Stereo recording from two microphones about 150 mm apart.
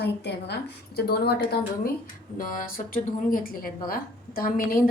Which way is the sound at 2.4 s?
65° left (ahead or behind).